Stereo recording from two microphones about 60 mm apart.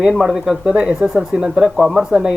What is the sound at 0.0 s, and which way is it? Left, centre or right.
Speech, centre.